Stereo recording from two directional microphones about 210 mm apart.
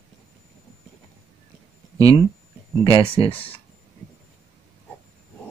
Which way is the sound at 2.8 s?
25° left (ahead or behind).